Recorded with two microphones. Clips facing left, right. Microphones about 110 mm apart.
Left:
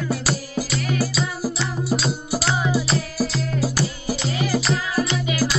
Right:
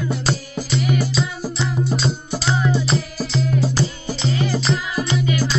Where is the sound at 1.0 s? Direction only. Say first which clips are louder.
Right 1 dB; 5° left (ahead or behind).